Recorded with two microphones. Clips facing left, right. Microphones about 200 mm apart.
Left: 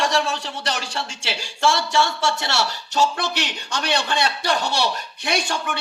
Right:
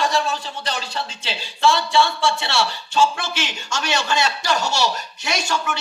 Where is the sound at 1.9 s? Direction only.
45° left (ahead or behind).